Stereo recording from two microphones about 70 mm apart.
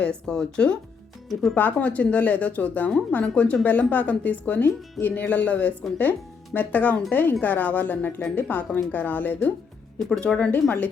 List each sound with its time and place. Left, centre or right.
0.0 s a woman's voice: centre
1.3 s speech: centre
1.5 s speech: left
10.0 s a woman's voice: centre
10.5 s speech: left